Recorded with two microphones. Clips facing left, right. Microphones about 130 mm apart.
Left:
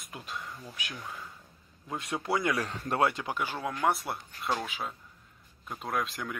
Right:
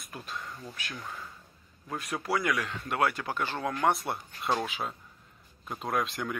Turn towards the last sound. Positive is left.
turn(degrees=0)  # may be behind; listen again after turning